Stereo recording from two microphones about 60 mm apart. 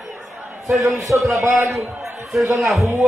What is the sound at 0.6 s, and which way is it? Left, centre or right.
Speech, centre.